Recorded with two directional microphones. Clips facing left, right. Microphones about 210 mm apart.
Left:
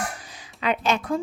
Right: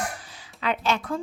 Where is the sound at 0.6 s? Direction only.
15° left (ahead or behind).